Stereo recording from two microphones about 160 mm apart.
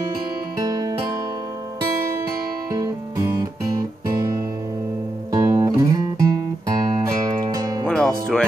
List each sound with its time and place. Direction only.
0.6 s music: 25° right (ahead or behind)
2.7 s music: 20° right (ahead or behind)
7.2 s music: 25° right (ahead or behind)
7.8 s music: 5° left (ahead or behind)